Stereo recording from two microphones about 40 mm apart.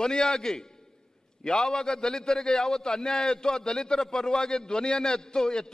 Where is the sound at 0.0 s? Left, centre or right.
Centre.